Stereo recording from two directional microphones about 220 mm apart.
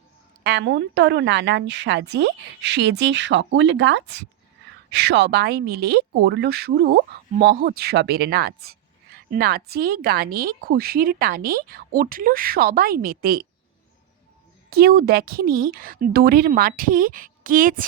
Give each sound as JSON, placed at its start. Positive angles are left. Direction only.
{"t": 0.4, "sound": "a woman's voice", "side_deg": -50}
{"t": 14.7, "sound": "speech", "side_deg": -45}